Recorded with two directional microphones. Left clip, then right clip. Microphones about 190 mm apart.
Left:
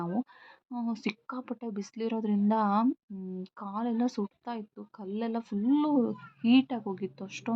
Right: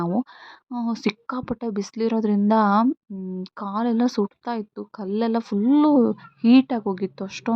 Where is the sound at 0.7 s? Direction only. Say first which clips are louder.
Right 9 dB; 30° right (ahead or behind).